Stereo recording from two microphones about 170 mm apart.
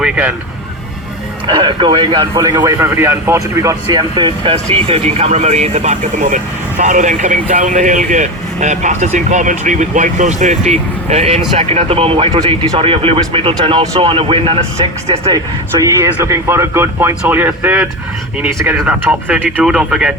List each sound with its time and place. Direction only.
0.0 s speech: 10° right (ahead or behind)
1.5 s speech: 25° right (ahead or behind)
2.3 s speech: 15° right (ahead or behind); by 15.3 s 35° right (ahead or behind)
15.8 s speech: 15° right (ahead or behind)